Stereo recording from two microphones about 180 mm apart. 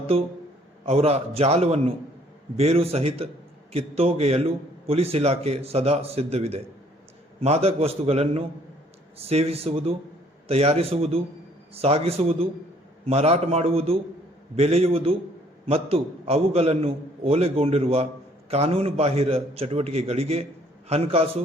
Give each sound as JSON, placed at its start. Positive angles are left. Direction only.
{"t": 0.1, "sound": "a man's voice", "side_deg": -30}